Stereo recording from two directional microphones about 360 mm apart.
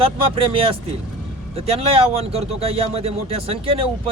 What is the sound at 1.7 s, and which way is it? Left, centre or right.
Speech, centre.